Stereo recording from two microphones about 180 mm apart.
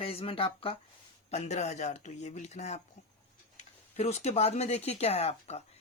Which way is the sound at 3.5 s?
35° left (ahead or behind).